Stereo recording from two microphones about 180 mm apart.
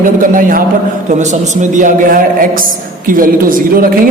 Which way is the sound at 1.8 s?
50° right (ahead or behind).